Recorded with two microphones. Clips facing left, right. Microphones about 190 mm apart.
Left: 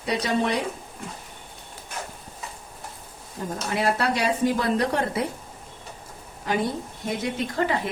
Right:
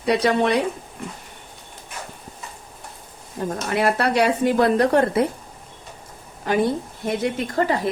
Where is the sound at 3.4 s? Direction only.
65° right (ahead or behind).